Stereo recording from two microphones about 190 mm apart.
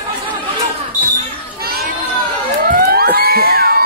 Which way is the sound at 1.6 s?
55° right (ahead or behind).